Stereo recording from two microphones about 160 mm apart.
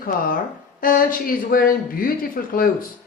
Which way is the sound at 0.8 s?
60° left (ahead or behind).